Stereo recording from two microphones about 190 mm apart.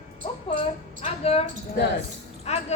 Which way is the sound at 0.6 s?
30° left (ahead or behind).